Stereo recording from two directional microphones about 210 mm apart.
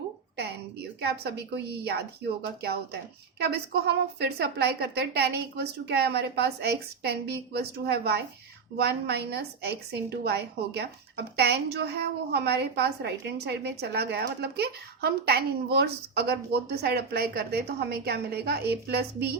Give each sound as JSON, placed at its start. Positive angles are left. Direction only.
{"t": 0.3, "sound": "a woman's voice", "side_deg": -50}